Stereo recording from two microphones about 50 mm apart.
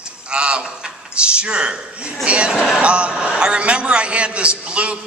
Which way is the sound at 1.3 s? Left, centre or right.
Right.